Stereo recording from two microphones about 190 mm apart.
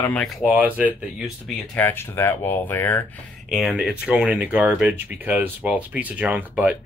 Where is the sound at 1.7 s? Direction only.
10° left (ahead or behind).